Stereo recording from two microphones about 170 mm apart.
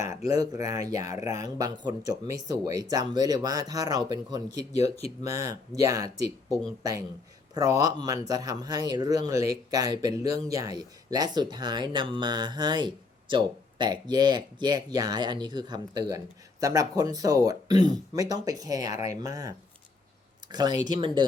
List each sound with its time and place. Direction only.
0.3 s speech: 20° right (ahead or behind)